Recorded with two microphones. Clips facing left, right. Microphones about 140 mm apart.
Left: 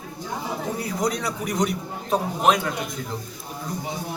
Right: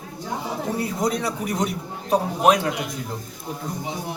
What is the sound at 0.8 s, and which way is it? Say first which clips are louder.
A man's voice: right 2 dB; 5° right (ahead or behind).